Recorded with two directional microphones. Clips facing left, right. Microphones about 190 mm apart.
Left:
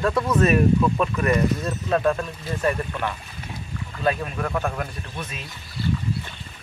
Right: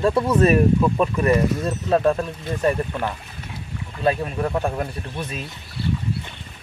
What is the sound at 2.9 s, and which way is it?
Speech, 20° right (ahead or behind).